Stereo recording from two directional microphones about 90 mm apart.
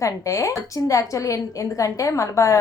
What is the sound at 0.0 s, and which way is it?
A woman's voice, 35° left (ahead or behind).